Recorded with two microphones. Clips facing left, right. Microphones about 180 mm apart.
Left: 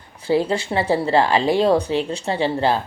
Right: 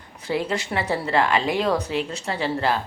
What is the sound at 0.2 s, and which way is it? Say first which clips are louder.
A woman's voice: left 6 dB; 30° left (ahead or behind).